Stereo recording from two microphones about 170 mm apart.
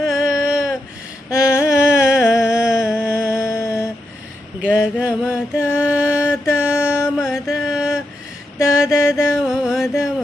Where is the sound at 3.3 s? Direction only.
15° left (ahead or behind).